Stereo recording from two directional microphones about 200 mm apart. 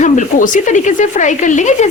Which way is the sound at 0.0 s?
40° left (ahead or behind).